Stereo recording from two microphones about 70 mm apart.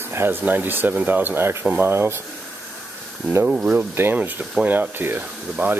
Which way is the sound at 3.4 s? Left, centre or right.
Right.